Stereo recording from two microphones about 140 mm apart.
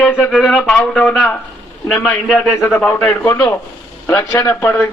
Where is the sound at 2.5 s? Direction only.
15° left (ahead or behind).